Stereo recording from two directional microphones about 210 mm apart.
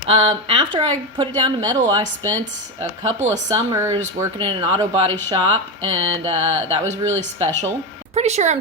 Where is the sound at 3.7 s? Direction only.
15° right (ahead or behind).